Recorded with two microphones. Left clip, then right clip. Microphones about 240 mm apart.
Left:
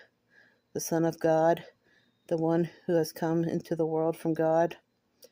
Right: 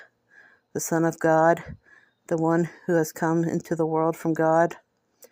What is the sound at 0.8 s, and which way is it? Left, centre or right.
Speech, centre.